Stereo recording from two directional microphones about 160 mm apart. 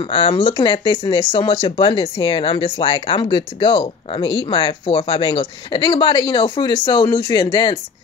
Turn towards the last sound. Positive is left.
turn(degrees=25)  # may be behind; listen again after turning